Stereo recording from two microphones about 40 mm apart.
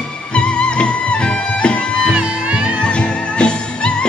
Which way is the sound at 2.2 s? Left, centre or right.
Right.